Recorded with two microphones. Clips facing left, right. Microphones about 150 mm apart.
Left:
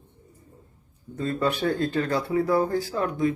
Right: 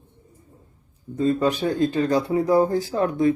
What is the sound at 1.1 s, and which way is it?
Speech, 15° right (ahead or behind).